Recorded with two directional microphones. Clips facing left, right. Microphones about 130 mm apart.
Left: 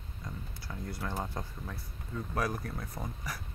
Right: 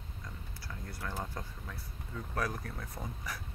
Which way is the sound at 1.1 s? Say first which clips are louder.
Left 3 dB; 15° left (ahead or behind).